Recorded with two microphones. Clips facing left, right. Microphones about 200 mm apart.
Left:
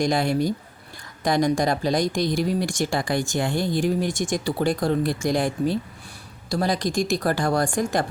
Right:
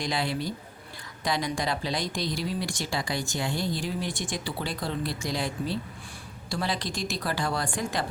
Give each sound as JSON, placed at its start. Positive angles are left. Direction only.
{"t": 0.0, "sound": "speech", "side_deg": 45}